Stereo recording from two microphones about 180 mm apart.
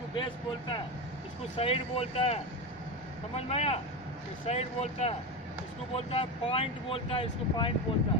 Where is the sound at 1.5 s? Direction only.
30° left (ahead or behind).